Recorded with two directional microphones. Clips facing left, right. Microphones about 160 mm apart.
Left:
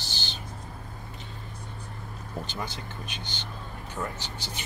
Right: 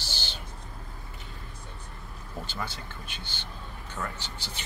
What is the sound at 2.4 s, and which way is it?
Speech, 15° left (ahead or behind).